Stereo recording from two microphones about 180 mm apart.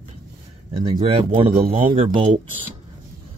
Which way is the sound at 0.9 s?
35° right (ahead or behind).